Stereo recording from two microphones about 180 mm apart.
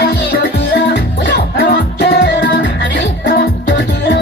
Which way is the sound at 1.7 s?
70° left (ahead or behind).